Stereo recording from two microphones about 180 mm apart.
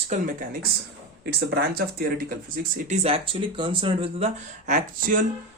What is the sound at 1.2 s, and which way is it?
Speech, 60° right (ahead or behind).